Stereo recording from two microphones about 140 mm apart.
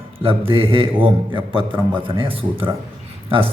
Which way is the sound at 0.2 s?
40° right (ahead or behind).